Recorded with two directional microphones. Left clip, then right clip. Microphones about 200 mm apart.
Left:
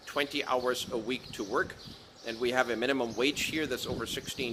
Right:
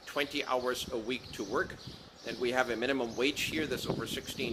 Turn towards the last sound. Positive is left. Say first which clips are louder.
# left 2 dB
turn(degrees=15)  # may be behind; listen again after turning